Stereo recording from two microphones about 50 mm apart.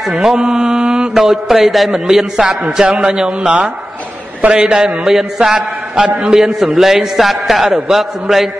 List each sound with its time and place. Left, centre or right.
0.0 s a man's voice: centre
0.5 s mantra: centre
1.1 s a man's voice: centre